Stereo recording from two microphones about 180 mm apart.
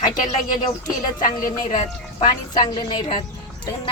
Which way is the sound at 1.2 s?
50° left (ahead or behind).